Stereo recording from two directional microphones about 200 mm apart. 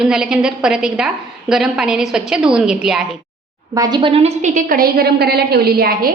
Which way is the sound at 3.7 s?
20° right (ahead or behind).